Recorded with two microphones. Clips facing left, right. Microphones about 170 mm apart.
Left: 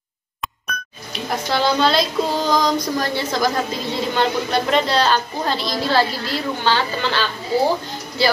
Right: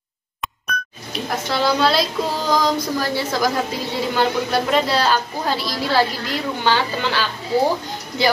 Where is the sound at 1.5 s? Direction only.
5° right (ahead or behind).